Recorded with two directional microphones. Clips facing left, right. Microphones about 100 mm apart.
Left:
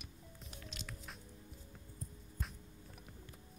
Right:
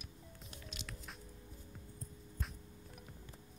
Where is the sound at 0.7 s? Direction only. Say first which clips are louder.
Right 1 dB; centre (ahead or behind).